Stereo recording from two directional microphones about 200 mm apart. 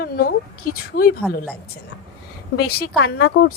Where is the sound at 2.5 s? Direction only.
55° left (ahead or behind).